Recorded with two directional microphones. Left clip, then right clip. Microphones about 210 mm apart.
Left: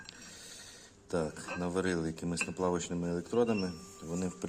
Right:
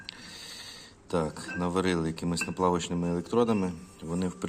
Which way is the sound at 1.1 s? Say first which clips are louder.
Right 4 dB; centre (ahead or behind).